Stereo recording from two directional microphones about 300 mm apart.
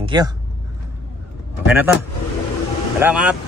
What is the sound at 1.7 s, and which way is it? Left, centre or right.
Speech, centre.